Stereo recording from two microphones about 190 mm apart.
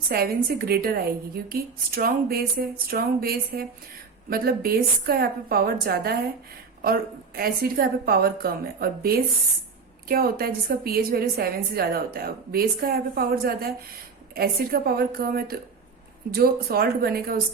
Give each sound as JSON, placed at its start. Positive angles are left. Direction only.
{"t": 0.1, "sound": "a woman's voice", "side_deg": -50}